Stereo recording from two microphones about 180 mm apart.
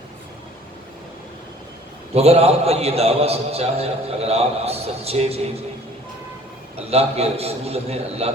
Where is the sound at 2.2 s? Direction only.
35° right (ahead or behind).